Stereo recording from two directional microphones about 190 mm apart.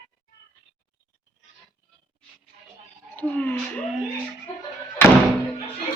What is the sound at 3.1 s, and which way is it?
Speech, 10° left (ahead or behind).